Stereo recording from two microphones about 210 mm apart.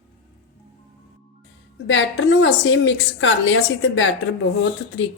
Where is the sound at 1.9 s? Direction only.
60° left (ahead or behind).